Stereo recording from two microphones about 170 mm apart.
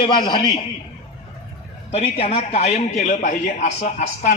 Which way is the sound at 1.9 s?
35° left (ahead or behind).